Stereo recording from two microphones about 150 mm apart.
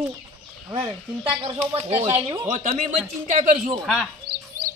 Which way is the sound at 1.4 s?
35° right (ahead or behind).